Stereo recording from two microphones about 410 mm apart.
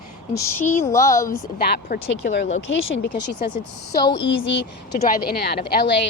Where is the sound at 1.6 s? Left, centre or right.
Left.